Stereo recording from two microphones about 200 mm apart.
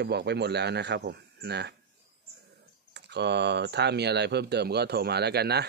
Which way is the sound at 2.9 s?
60° right (ahead or behind).